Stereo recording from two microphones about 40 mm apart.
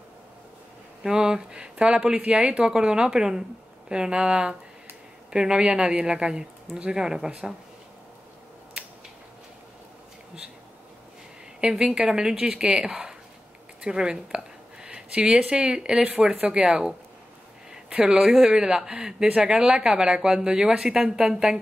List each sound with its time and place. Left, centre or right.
1.0 s speech: centre
1.5 s a woman's voice: right
11.7 s a woman's voice: right